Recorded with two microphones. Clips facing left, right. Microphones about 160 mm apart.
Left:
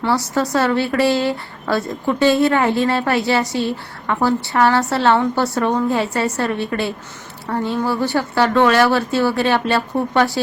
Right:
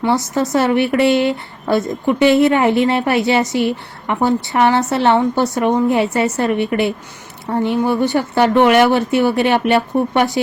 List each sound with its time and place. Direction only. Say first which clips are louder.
0.0 s speech: right 2 dB; 20° right (ahead or behind)